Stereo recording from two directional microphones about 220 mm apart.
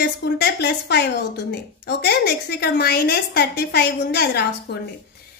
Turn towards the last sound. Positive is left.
turn(degrees=50)  # may be behind; listen again after turning